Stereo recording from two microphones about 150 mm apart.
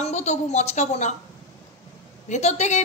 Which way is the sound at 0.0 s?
50° left (ahead or behind).